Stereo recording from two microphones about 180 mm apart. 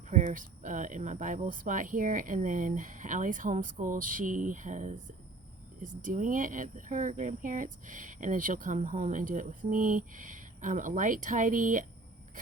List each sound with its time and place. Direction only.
0.3 s speech: 45° right (ahead or behind)